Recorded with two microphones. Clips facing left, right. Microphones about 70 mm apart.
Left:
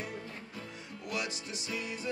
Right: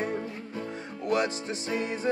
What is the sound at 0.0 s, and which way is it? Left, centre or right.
Music, right.